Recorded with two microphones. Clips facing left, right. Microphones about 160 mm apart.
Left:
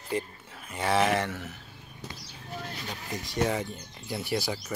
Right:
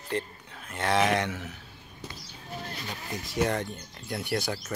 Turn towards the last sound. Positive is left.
turn(degrees=0)  # may be behind; listen again after turning